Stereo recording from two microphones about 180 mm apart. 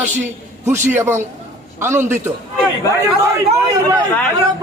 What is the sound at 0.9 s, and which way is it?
A man's voice, 15° right (ahead or behind).